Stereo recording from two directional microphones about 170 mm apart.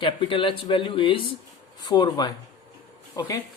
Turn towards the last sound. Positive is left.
turn(degrees=20)  # may be behind; listen again after turning